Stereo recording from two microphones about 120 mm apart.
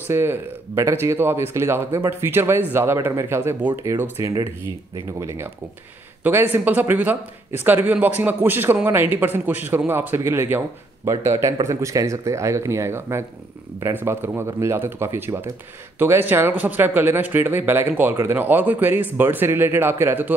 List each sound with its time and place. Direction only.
0.1 s speech: 20° right (ahead or behind)
6.2 s a man's voice: 15° right (ahead or behind)